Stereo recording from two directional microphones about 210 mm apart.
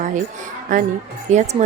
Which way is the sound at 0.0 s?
35° right (ahead or behind).